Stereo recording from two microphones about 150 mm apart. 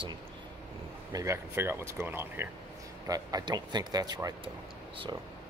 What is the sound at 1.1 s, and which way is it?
Speech, 20° right (ahead or behind).